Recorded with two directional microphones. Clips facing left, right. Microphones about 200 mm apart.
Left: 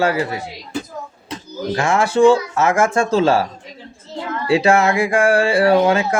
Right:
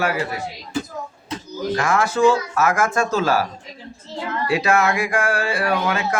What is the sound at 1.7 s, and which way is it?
Speech, 25° left (ahead or behind).